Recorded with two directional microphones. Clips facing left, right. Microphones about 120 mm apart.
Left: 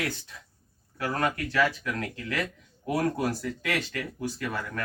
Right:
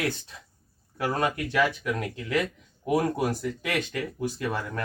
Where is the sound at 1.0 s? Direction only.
20° right (ahead or behind).